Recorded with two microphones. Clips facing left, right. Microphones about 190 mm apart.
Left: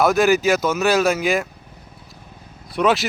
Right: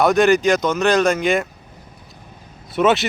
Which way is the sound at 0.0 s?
Centre (ahead or behind).